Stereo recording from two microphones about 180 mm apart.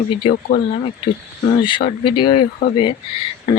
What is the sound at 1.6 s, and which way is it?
Speech, 30° left (ahead or behind).